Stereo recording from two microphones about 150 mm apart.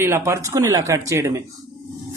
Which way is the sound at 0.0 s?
20° right (ahead or behind).